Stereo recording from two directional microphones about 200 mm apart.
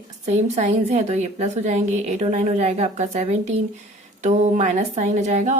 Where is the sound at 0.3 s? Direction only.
35° right (ahead or behind).